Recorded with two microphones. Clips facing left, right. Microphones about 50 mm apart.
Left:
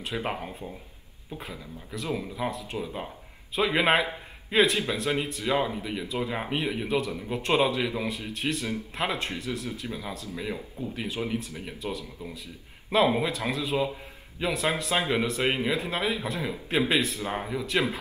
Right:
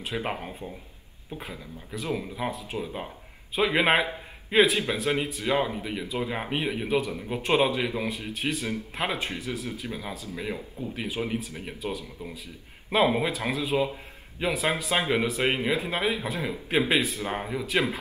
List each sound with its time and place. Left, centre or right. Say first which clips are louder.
0.0 s speech: even; centre
9.8 s speech: even; centre